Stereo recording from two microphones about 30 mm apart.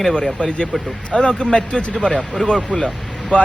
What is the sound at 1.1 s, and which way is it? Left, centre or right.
Speech, centre.